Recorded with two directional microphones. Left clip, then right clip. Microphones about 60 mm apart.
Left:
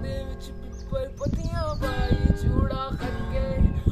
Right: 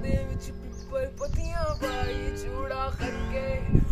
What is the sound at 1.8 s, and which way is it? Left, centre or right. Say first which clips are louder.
Music: left 2 dB; right.